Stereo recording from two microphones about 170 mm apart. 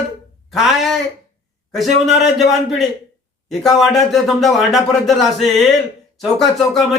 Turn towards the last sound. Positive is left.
turn(degrees=0)  # may be behind; listen again after turning